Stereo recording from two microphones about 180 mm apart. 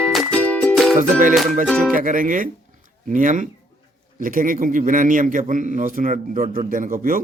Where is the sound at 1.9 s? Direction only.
50° right (ahead or behind).